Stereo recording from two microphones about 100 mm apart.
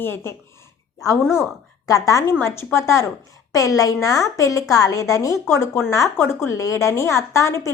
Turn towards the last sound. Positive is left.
turn(degrees=30)  # may be behind; listen again after turning